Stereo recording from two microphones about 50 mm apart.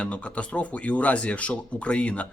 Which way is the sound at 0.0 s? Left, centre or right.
Left.